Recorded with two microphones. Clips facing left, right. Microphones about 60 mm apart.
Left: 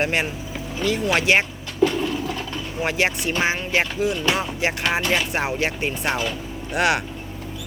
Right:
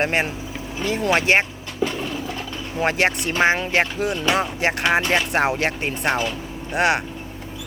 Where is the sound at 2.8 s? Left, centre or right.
Right.